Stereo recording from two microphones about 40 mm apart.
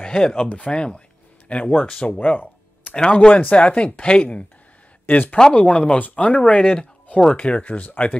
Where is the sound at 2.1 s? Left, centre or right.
Left.